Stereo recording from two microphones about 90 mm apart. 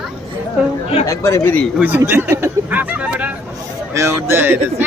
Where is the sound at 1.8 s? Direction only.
20° right (ahead or behind).